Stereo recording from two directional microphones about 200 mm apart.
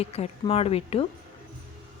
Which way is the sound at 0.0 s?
30° left (ahead or behind).